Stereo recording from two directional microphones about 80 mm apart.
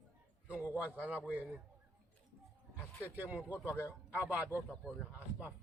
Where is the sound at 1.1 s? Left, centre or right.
Left.